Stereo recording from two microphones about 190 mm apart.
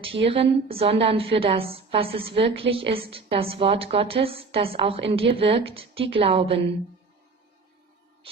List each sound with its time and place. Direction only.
0.3 s a woman's voice: 30° right (ahead or behind)